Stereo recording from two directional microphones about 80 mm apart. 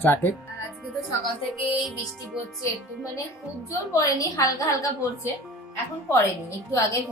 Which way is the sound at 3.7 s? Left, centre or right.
Left.